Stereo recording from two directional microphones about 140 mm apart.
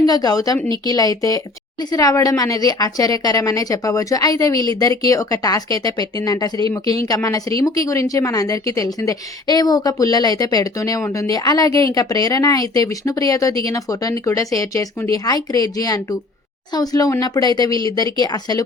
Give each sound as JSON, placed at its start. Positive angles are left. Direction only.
{"t": 0.0, "sound": "a woman's voice", "side_deg": 25}